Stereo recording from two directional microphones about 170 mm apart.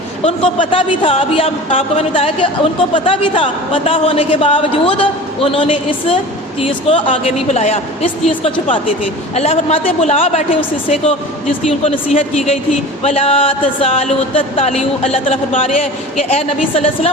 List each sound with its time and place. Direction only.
0.2 s a man's voice: 35° left (ahead or behind)